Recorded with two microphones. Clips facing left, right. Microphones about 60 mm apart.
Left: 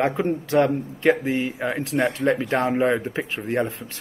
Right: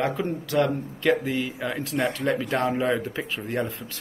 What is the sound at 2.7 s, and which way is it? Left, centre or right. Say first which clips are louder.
Speech: left 3 dB; left.